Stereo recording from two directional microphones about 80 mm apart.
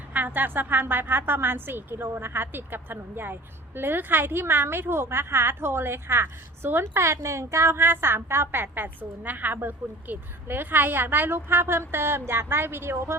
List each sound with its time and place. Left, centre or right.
0.1 s a woman's voice: right